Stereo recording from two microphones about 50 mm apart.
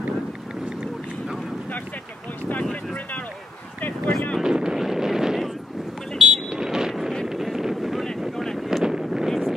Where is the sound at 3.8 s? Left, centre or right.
Left.